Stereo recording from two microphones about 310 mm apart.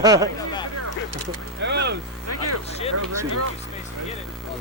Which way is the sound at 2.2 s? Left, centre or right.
Right.